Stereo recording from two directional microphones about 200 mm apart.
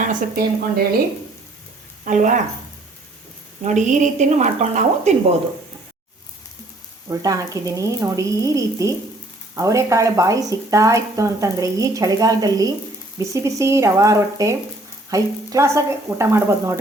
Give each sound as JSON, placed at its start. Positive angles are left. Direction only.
{"t": 0.0, "sound": "a woman's voice", "side_deg": -40}
{"t": 2.0, "sound": "a woman's voice", "side_deg": -40}
{"t": 3.6, "sound": "a woman's voice", "side_deg": -35}
{"t": 7.1, "sound": "speech", "side_deg": -15}